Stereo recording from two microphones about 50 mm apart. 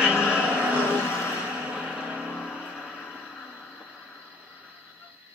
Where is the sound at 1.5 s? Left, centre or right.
Right.